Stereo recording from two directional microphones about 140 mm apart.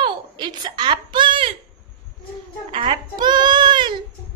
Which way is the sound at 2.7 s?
35° right (ahead or behind).